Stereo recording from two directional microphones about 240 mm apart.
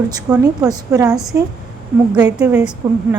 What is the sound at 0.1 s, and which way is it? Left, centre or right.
A woman's voice, centre.